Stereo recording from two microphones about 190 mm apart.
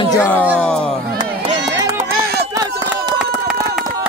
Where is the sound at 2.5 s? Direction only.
20° right (ahead or behind).